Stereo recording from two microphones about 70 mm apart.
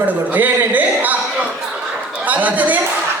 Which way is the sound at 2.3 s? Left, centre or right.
Right.